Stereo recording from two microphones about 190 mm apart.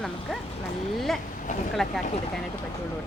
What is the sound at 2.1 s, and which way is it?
Speech, 30° left (ahead or behind).